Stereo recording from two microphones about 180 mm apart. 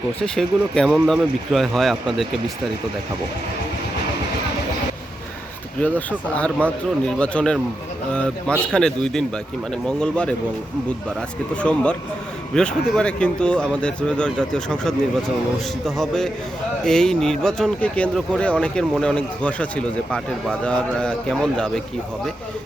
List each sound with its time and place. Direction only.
0.2 s speech: 5° left (ahead or behind)
5.8 s speech: 10° left (ahead or behind)
11.5 s speech: 5° left (ahead or behind)
16.0 s speech: centre (ahead or behind)